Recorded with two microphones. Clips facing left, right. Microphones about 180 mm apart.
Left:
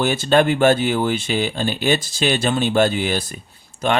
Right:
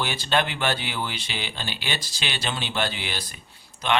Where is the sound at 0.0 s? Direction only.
45° left (ahead or behind).